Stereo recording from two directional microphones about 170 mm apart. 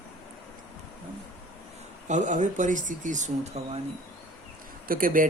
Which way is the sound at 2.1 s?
45° right (ahead or behind).